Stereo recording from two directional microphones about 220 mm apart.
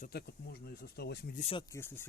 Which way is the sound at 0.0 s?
45° left (ahead or behind).